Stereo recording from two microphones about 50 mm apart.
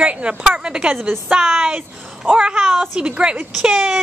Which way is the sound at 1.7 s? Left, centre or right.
Right.